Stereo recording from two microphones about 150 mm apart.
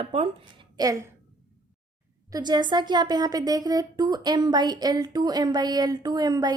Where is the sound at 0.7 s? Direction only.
25° right (ahead or behind).